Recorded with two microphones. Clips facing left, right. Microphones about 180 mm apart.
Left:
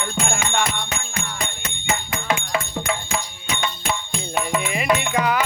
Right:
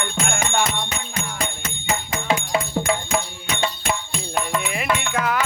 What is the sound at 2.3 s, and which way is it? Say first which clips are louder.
Music: right 2 dB; 15° right (ahead or behind).